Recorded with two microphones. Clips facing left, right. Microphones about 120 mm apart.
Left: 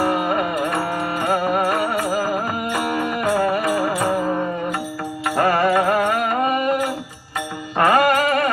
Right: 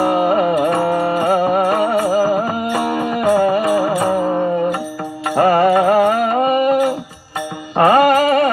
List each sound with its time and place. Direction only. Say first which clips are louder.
0.0 s music: right 5 dB; 30° right (ahead or behind)